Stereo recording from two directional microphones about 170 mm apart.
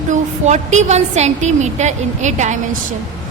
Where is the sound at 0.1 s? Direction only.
45° right (ahead or behind).